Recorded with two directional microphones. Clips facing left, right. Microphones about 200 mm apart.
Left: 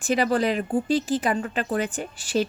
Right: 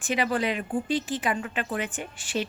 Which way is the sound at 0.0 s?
35° left (ahead or behind).